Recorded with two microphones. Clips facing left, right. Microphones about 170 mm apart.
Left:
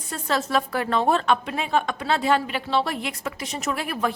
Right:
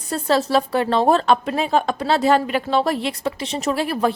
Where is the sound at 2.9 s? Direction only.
30° right (ahead or behind).